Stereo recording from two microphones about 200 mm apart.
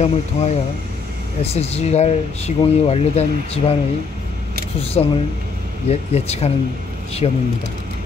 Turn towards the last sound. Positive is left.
turn(degrees=30)  # may be behind; listen again after turning